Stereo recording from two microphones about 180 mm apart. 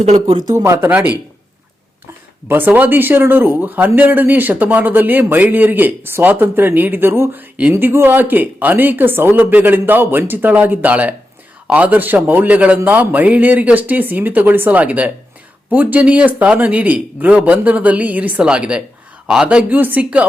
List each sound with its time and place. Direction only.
0.0 s speech: 40° right (ahead or behind)
0.3 s speech: 20° right (ahead or behind)
2.5 s speech: 10° right (ahead or behind)